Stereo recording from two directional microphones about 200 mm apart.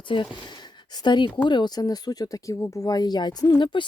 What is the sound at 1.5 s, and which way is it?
Speech, 20° left (ahead or behind).